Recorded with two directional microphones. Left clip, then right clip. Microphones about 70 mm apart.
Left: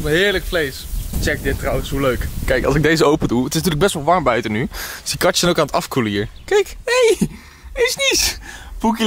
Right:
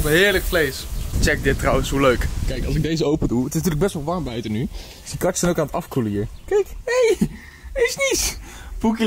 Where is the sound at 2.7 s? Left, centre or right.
Left.